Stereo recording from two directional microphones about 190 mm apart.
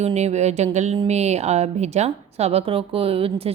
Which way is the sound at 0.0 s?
35° right (ahead or behind).